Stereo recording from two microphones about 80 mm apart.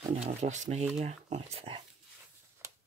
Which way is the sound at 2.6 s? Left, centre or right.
Right.